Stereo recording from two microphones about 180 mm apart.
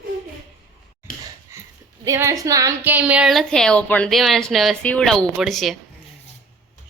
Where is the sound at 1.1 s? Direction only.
50° left (ahead or behind).